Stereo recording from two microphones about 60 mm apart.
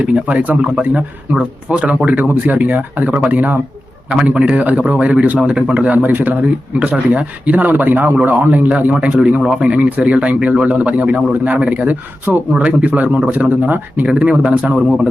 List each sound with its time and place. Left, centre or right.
0.0 s a man's voice: right
6.0 s a man's voice: right